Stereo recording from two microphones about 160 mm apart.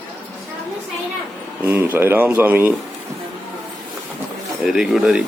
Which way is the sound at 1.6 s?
10° right (ahead or behind).